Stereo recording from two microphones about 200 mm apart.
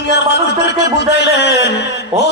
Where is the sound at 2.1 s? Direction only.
30° right (ahead or behind).